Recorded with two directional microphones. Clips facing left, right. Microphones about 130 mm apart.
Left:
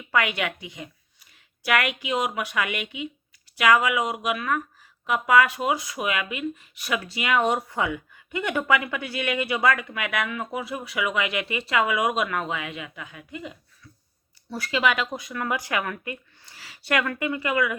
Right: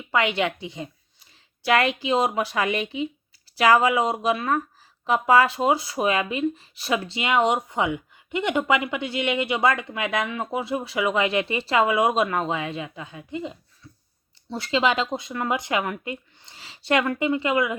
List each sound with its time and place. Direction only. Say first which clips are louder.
0.1 s a woman's voice: right 2 dB; 25° right (ahead or behind)